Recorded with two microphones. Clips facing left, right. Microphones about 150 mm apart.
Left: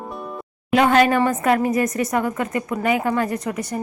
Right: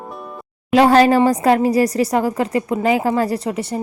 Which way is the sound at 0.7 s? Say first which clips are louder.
Right 4 dB; 35° right (ahead or behind).